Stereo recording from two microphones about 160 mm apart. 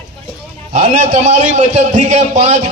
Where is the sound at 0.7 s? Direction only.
45° right (ahead or behind).